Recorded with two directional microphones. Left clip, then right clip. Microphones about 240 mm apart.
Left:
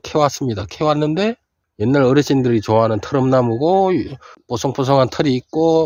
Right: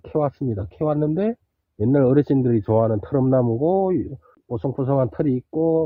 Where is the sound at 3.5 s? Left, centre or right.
Left.